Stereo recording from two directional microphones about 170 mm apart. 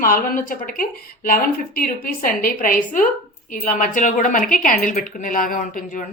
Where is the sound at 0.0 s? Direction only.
55° left (ahead or behind).